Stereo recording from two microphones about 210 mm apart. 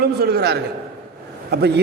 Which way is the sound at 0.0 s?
50° right (ahead or behind).